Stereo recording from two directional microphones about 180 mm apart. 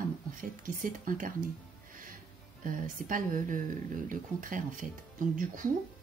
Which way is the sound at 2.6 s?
50° right (ahead or behind).